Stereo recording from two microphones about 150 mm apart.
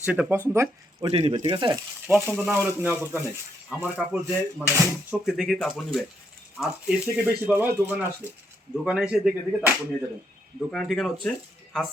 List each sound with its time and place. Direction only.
0.0 s speech: 10° right (ahead or behind)
1.1 s speech: 40° right (ahead or behind)
2.3 s speech: 10° right (ahead or behind)
5.1 s speech: 5° right (ahead or behind)